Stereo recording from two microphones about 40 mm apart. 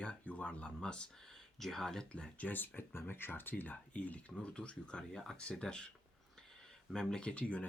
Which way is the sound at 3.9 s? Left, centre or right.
Left.